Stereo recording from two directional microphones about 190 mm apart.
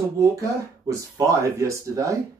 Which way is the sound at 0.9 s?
15° right (ahead or behind).